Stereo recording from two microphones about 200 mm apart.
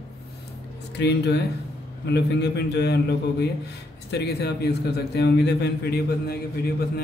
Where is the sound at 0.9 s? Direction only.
55° left (ahead or behind).